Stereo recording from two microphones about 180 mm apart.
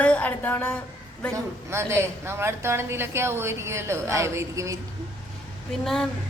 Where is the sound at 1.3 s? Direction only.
15° right (ahead or behind).